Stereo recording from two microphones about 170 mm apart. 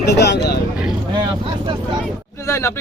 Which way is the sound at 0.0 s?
80° left.